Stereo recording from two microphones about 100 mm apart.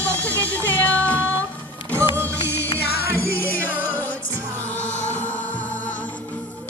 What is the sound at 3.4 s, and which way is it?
Music, 20° left (ahead or behind).